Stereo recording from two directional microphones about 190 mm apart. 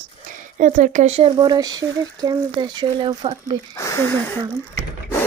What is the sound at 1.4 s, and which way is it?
Speech, 20° right (ahead or behind).